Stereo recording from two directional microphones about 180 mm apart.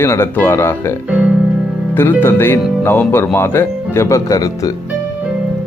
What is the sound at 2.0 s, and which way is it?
A man's voice, 10° left (ahead or behind).